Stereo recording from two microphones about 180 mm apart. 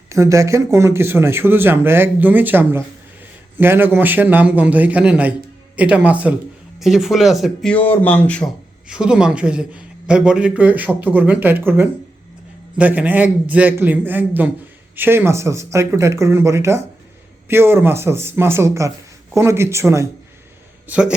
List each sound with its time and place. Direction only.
0.1 s a man's voice: 15° right (ahead or behind); by 8.4 s 10° left (ahead or behind)
8.9 s a man's voice: 5° right (ahead or behind)